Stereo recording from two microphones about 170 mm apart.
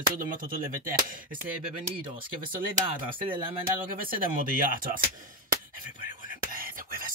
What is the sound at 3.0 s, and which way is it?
Speech, 30° right (ahead or behind).